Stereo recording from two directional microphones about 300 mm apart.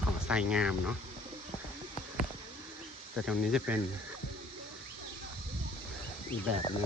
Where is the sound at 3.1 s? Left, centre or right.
Centre.